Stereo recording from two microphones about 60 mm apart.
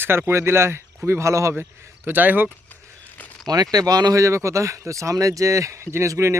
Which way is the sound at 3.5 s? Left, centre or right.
Right.